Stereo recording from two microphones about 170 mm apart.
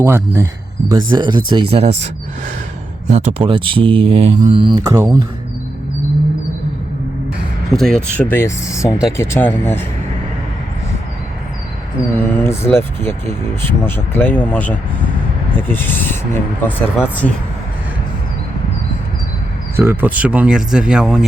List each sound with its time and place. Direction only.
0.0 s speech: 15° right (ahead or behind)
0.9 s speech: 25° right (ahead or behind)
3.1 s speech: 40° right (ahead or behind)
4.7 s speech: 20° right (ahead or behind)
7.7 s speech: 5° left (ahead or behind)
12.1 s speech: 15° left (ahead or behind)
19.7 s speech: 15° right (ahead or behind)